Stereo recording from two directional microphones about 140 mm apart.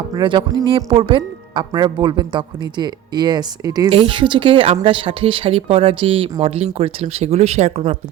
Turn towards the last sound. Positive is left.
turn(degrees=-50)  # may be behind; listen again after turning